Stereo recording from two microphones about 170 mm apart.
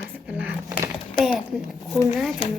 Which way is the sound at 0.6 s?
20° right (ahead or behind).